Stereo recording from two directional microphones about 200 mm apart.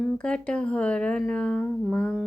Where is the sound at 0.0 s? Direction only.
5° left (ahead or behind).